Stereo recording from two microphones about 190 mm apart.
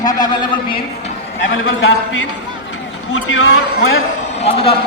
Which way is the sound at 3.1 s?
80° left.